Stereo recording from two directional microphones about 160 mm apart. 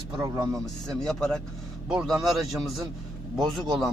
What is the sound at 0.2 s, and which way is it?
Speech, 20° right (ahead or behind).